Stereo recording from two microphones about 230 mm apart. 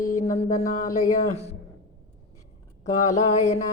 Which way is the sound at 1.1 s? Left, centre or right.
Left.